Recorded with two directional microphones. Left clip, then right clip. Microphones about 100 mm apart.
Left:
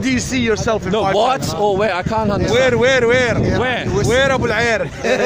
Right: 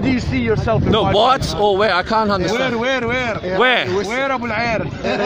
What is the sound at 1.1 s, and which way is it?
Speech, 10° left (ahead or behind).